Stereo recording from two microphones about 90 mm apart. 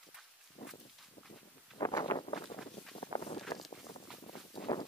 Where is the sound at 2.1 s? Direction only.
25° left (ahead or behind).